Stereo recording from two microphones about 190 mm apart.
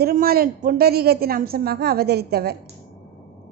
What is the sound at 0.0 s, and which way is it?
A woman's voice, 50° right (ahead or behind).